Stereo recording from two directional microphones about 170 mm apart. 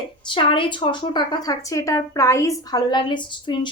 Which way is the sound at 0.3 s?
30° left (ahead or behind).